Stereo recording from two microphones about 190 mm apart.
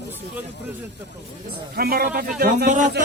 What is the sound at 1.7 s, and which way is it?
Speech, 55° right (ahead or behind).